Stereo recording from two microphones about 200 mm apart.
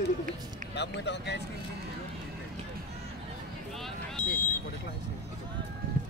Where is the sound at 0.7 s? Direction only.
60° left (ahead or behind).